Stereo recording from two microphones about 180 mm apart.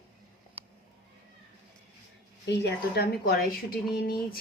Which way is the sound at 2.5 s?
70° left (ahead or behind).